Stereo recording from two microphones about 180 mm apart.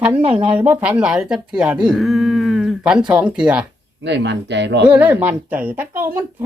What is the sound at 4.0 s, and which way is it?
Speech, 75° right (ahead or behind).